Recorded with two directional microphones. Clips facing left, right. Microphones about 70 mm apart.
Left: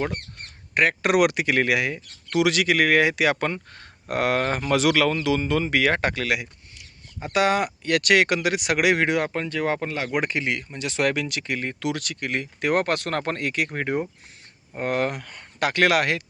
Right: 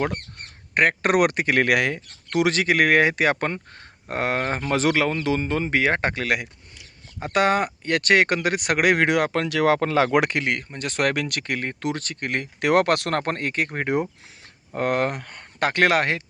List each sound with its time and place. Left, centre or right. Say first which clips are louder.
0.7 s speech: right 1 dB; right
2.4 s speech: right 1 dB; right
10.6 s speech: even; right
11.7 s speech: even; right
12.3 s speech: right 3 dB; right
13.1 s speech: right 1 dB; right
14.7 s speech: right 2 dB; right